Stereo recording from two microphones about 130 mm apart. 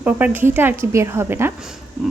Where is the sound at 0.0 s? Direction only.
15° right (ahead or behind).